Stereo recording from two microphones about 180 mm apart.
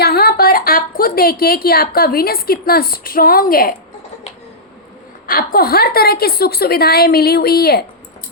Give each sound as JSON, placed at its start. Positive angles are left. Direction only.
{"t": 0.0, "sound": "a woman's voice", "side_deg": 60}
{"t": 5.2, "sound": "a woman's voice", "side_deg": 55}